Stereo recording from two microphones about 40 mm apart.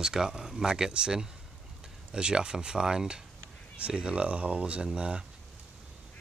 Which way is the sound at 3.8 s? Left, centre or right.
Right.